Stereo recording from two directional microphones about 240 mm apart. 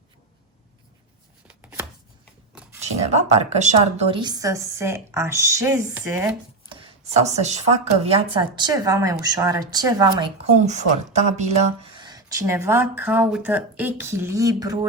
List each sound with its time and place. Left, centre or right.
1.5 s chopping: centre
3.1 s speech: right; by 6.7 s centre
6.7 s a sound: right
8.0 s speech: right
10.7 s speech: right